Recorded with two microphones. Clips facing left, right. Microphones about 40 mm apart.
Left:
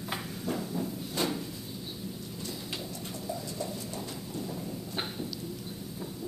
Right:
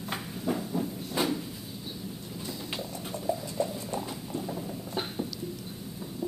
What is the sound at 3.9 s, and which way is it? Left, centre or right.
Clip-clop, right.